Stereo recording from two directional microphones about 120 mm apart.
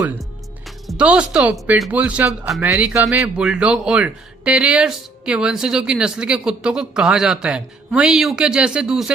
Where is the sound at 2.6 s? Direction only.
25° right (ahead or behind).